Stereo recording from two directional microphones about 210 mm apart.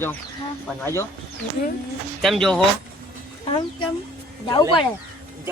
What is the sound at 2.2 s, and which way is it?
Speech, centre (ahead or behind).